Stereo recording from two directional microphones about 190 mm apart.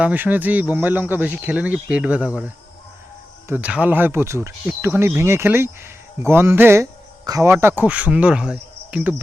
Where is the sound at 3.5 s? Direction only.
5° right (ahead or behind).